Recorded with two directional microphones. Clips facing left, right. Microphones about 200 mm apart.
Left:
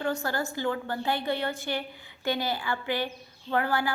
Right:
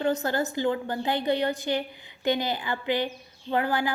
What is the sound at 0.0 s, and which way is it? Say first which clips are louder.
A woman's voice: right 4 dB; 20° right (ahead or behind).